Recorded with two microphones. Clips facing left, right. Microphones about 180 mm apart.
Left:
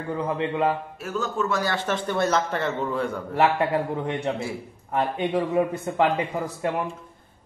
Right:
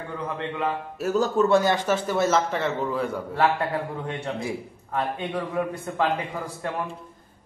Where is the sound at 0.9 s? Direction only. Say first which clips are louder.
Right 6 dB; 40° right (ahead or behind).